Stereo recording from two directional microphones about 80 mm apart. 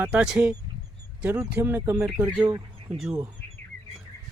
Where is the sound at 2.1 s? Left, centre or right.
Centre.